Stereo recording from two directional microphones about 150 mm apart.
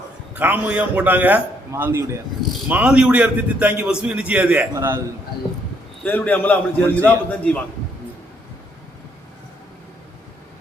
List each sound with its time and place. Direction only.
0.3 s a man's voice: 10° right (ahead or behind)
6.0 s a man's voice: 10° left (ahead or behind)